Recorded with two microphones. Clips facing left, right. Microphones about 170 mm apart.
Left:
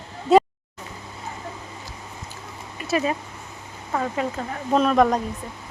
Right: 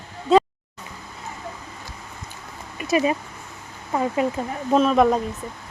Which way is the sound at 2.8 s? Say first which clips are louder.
Right 3 dB; 15° right (ahead or behind).